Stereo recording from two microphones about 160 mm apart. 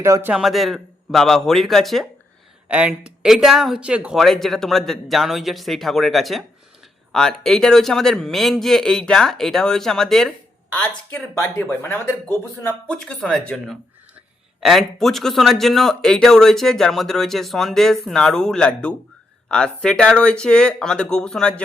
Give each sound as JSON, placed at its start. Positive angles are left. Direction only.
{"t": 0.0, "sound": "a man's voice", "side_deg": -15}
{"t": 0.3, "sound": "speech", "side_deg": 0}
{"t": 11.4, "sound": "speech", "side_deg": 15}